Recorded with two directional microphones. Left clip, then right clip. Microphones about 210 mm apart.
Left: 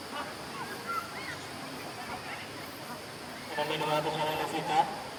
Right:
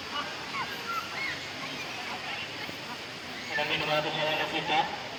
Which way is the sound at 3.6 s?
45° left (ahead or behind).